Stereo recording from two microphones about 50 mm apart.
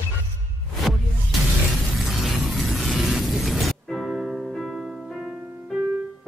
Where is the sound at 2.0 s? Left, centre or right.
Centre.